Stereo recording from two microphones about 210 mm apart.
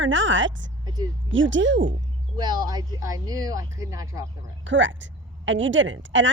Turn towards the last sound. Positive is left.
turn(degrees=-60)  # may be behind; listen again after turning